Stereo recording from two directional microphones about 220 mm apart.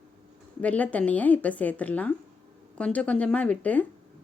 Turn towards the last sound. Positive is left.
turn(degrees=5)  # may be behind; listen again after turning